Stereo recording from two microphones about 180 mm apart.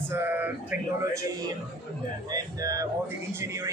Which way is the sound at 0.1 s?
10° right (ahead or behind).